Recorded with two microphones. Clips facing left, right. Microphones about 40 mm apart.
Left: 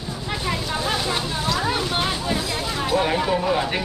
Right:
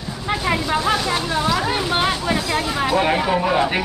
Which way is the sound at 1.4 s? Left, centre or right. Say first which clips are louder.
Right 3 dB; centre.